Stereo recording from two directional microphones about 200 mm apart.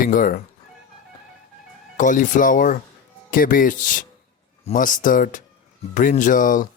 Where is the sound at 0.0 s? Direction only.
45° left (ahead or behind).